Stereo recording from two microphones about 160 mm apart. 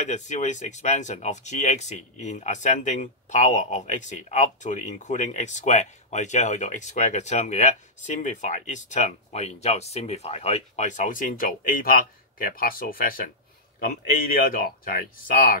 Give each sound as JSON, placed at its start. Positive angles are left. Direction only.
{"t": 0.0, "sound": "a man's voice", "side_deg": 50}